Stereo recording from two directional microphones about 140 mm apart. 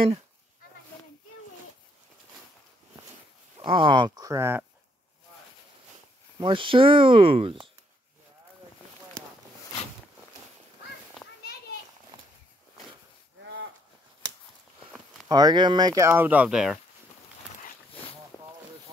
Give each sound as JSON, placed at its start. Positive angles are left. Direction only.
{"t": 3.5, "sound": "speech", "side_deg": -35}
{"t": 6.4, "sound": "speech", "side_deg": -35}
{"t": 15.2, "sound": "speech", "side_deg": -30}